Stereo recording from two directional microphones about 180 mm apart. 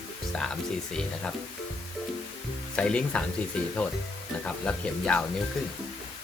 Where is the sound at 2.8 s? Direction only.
5° left (ahead or behind).